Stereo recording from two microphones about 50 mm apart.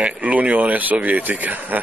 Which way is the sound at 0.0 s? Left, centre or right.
Right.